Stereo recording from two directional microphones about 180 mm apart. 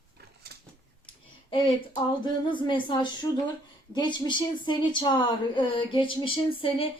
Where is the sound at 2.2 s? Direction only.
25° left (ahead or behind).